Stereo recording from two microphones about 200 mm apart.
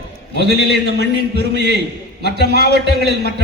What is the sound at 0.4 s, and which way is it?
A man's voice, 60° right (ahead or behind).